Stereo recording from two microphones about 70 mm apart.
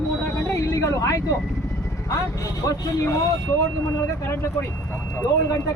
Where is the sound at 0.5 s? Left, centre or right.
Left.